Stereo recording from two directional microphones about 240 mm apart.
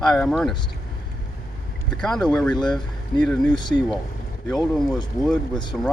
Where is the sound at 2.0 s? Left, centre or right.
Centre.